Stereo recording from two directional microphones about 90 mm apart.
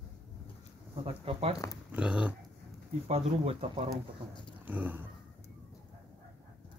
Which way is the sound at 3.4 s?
90° right.